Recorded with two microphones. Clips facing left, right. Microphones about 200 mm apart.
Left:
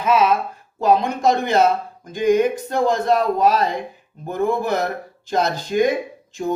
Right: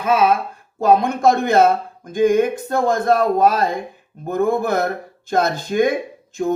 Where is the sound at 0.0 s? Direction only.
50° right (ahead or behind).